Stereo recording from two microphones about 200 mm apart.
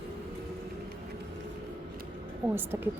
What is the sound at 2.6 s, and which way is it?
Speech, 10° right (ahead or behind).